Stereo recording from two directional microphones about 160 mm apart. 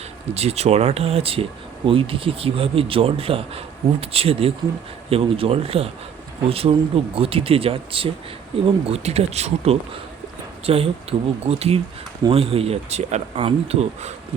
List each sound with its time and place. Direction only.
0.3 s a man's voice: 40° right (ahead or behind)